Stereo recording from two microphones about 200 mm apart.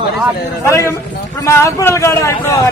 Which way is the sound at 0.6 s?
15° left (ahead or behind).